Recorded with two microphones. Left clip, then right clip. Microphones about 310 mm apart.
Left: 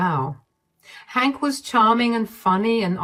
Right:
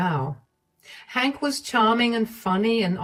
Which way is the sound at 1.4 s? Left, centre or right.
Left.